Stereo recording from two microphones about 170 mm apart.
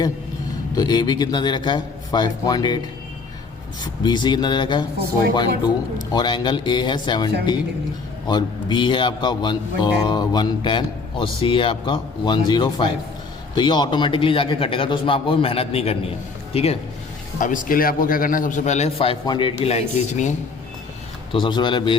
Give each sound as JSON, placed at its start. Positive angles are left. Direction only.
{"t": 0.8, "sound": "speech", "side_deg": 25}
{"t": 4.0, "sound": "speech", "side_deg": 25}
{"t": 6.0, "sound": "speech", "side_deg": 25}
{"t": 8.3, "sound": "a man's voice", "side_deg": 25}
{"t": 17.4, "sound": "a man's voice", "side_deg": 50}
{"t": 21.3, "sound": "speech", "side_deg": 25}